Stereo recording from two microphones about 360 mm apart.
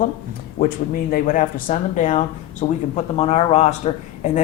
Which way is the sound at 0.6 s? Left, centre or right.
Left.